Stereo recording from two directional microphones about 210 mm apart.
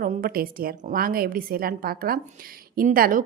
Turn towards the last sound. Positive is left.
turn(degrees=-40)  # may be behind; listen again after turning